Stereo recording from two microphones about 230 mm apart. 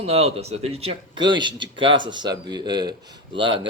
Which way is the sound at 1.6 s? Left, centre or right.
Right.